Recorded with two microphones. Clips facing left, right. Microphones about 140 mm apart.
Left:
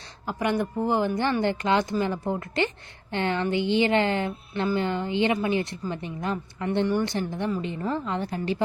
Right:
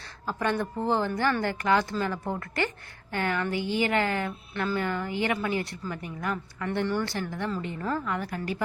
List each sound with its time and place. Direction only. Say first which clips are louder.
0.3 s speech: left 2 dB; 15° left (ahead or behind)